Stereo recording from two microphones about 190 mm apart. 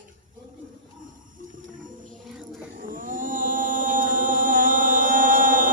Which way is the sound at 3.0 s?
45° right (ahead or behind).